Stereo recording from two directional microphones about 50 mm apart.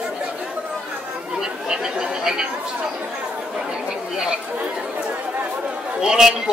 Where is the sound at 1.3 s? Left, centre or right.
Centre.